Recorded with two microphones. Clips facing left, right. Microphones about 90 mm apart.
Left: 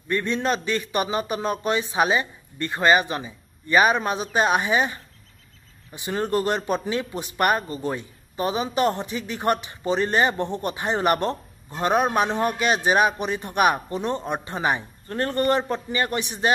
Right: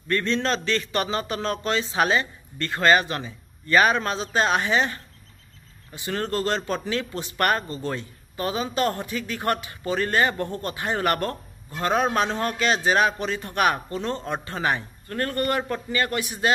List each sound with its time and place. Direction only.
0.1 s a man's voice: 15° left (ahead or behind)